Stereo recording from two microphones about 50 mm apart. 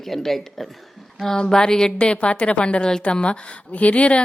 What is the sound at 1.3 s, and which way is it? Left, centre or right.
A woman's voice, centre.